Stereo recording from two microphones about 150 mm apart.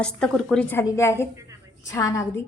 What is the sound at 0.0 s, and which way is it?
A woman's voice, 5° left (ahead or behind).